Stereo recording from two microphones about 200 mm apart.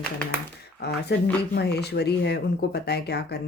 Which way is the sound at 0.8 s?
55° left (ahead or behind).